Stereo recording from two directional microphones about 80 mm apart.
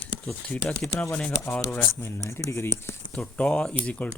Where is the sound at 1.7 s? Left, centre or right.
Left.